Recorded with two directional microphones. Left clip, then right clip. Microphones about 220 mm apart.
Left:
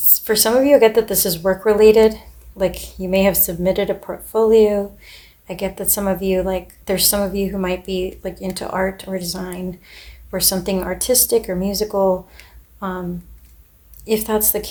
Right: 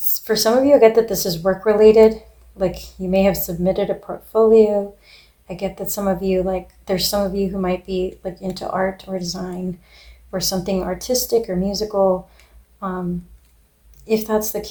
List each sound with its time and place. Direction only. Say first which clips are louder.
0.1 s speech: even; 30° left (ahead or behind)
14.1 s speech: even; 30° left (ahead or behind)